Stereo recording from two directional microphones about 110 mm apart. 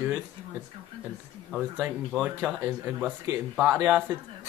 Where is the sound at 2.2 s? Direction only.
15° right (ahead or behind).